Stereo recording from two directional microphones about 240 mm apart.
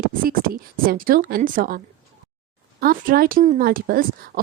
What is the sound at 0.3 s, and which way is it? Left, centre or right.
Speech, right.